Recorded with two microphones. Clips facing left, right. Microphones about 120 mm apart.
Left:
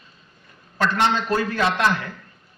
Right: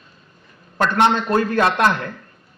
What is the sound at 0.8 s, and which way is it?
A man's voice, 55° right (ahead or behind).